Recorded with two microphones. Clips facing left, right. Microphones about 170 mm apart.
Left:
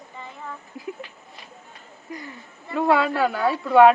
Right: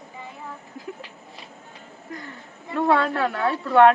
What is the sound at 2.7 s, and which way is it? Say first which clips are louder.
A woman's voice: left 1 dB; 5° left (ahead or behind).